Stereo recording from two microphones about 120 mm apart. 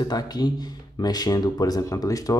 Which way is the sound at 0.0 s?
35° left (ahead or behind).